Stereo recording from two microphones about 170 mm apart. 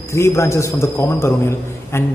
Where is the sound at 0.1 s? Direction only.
15° left (ahead or behind).